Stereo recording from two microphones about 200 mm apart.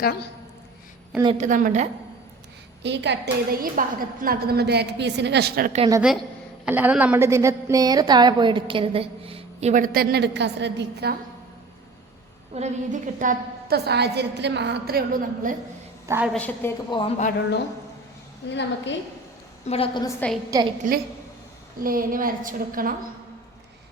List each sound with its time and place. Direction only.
1.4 s a woman's voice: 40° right (ahead or behind)
2.8 s a woman's voice: 60° right (ahead or behind)
6.7 s a woman's voice: 10° right (ahead or behind); by 11.2 s 55° right (ahead or behind)
12.5 s a woman's voice: 35° right (ahead or behind)
16.0 s a woman's voice: 10° right (ahead or behind)
16.3 s a woman's voice: 10° left (ahead or behind)
16.9 s speech: 35° left (ahead or behind)
18.4 s a woman's voice: 60° left (ahead or behind)
19.6 s a woman's voice: 30° left (ahead or behind)
20.1 s a woman's voice: 5° left (ahead or behind)
20.5 s a woman's voice: 20° right (ahead or behind)
21.8 s a woman's voice: 45° right (ahead or behind)